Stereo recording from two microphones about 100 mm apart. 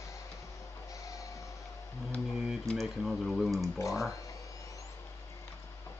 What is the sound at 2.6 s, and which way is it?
Speech, centre (ahead or behind).